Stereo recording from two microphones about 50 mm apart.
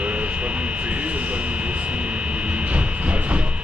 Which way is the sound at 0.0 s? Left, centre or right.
Right.